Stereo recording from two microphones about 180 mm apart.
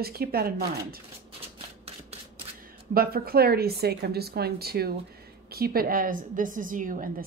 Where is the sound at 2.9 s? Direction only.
55° right (ahead or behind).